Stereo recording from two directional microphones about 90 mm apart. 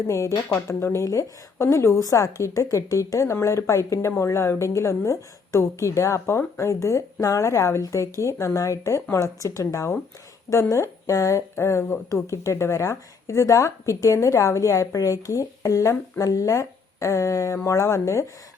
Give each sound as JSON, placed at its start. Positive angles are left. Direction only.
{"t": 0.1, "sound": "speech", "side_deg": 35}